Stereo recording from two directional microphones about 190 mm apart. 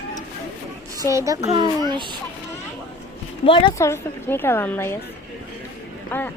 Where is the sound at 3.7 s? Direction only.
15° left (ahead or behind).